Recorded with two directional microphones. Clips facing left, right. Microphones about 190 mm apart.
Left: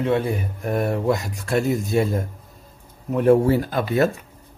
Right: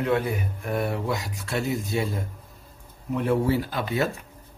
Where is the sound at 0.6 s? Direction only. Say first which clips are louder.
Left 5 dB; 45° left (ahead or behind).